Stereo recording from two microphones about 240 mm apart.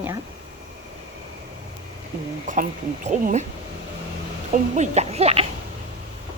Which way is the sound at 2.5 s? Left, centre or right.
Right.